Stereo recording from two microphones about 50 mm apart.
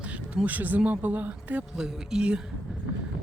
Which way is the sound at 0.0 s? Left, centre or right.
Right.